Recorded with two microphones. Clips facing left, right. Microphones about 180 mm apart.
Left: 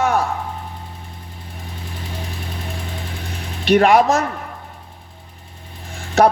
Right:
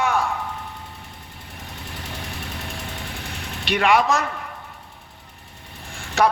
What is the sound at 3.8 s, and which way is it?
Speech, 35° left (ahead or behind).